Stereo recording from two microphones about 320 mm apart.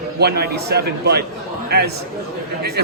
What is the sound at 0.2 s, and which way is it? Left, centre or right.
A man's voice, right.